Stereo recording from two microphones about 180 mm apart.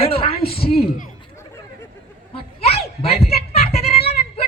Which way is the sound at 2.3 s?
35° left (ahead or behind).